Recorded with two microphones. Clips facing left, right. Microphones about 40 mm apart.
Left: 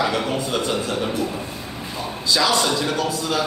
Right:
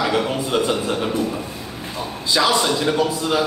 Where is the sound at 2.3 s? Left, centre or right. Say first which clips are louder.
Right 2 dB; centre.